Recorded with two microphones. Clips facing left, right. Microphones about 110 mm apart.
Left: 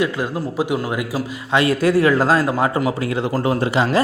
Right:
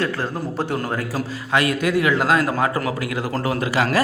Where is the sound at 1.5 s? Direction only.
30° left (ahead or behind).